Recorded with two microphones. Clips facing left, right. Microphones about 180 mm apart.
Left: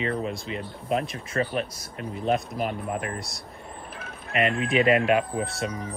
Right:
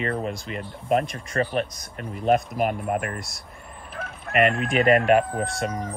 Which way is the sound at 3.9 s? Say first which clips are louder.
Right 5 dB; 55° right (ahead or behind).